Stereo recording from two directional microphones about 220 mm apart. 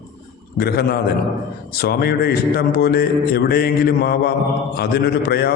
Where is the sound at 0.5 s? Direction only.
45° left (ahead or behind).